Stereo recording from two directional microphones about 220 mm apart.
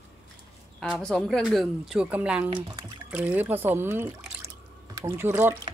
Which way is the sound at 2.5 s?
20° right (ahead or behind).